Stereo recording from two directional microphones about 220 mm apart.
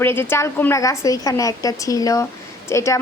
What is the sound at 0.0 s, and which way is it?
A woman's voice, 10° left (ahead or behind).